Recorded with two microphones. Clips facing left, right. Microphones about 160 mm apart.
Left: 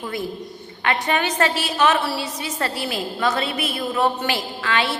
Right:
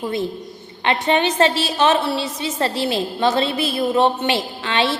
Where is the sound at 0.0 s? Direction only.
25° right (ahead or behind).